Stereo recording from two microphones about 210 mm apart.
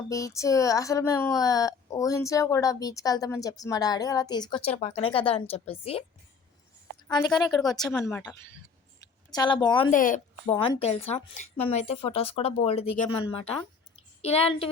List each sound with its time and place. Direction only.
0.1 s speech: 15° left (ahead or behind)
7.1 s a woman's voice: 20° left (ahead or behind)
9.9 s speech: 40° left (ahead or behind)
10.6 s a woman's voice: 30° left (ahead or behind)